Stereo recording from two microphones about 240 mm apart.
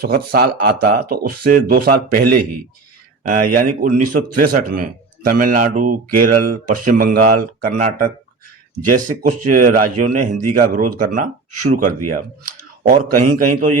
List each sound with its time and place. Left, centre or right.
0.0 s speech: right
2.2 s a man's voice: right
3.2 s speech: right
9.0 s speech: right